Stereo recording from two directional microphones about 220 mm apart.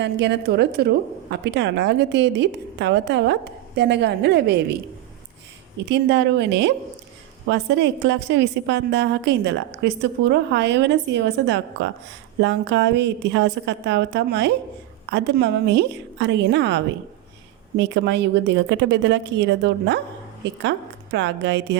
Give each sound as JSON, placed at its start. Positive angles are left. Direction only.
{"t": 0.0, "sound": "a woman's voice", "side_deg": -50}
{"t": 5.9, "sound": "a woman's voice", "side_deg": -50}